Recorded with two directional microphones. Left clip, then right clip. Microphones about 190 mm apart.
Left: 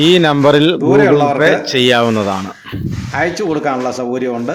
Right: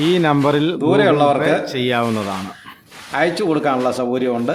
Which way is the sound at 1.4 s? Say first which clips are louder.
Left 6 dB; 15° left (ahead or behind).